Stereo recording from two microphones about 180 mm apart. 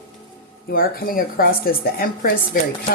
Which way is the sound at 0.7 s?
55° left (ahead or behind).